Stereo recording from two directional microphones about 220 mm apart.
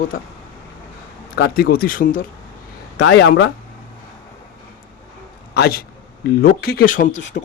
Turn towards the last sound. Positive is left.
turn(degrees=35)  # may be behind; listen again after turning